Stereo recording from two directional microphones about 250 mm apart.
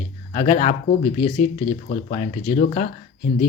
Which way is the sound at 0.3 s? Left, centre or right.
Left.